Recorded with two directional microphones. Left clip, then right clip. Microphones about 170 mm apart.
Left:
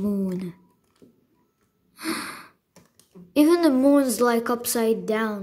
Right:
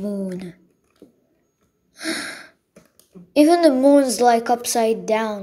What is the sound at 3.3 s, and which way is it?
Speech, 35° left (ahead or behind).